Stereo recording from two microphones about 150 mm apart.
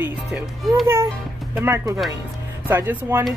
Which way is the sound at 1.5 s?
15° right (ahead or behind).